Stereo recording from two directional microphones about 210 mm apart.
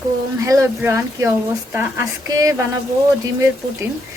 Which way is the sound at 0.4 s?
15° right (ahead or behind).